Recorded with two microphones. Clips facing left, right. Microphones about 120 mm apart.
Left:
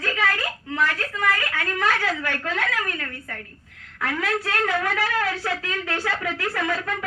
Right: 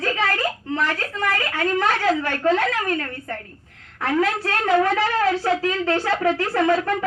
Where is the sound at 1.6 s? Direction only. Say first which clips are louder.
Right 6 dB; 25° right (ahead or behind).